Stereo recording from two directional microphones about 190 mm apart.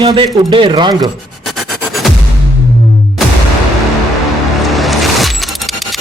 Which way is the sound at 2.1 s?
Centre (ahead or behind).